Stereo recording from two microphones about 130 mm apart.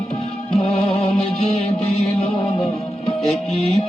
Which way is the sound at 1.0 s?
50° left (ahead or behind).